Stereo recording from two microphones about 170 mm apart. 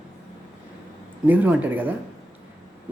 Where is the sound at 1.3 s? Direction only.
10° right (ahead or behind).